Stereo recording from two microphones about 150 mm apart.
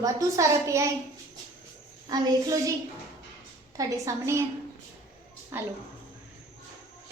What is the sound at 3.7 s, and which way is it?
Speech, 20° right (ahead or behind).